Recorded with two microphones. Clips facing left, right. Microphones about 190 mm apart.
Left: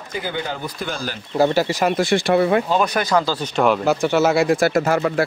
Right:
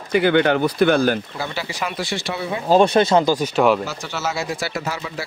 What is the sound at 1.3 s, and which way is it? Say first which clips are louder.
Speech: left 10 dB; 45° left (ahead or behind).